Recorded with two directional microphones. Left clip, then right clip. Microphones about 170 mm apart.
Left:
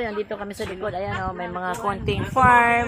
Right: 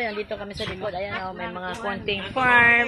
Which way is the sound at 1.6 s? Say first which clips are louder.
Left 3 dB; 30° left (ahead or behind).